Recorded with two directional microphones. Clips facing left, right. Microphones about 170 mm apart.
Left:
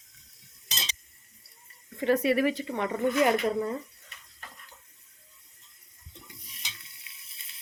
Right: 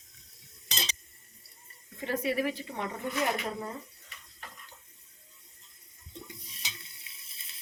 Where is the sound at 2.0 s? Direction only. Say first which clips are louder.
Left 6 dB; 70° left (ahead or behind).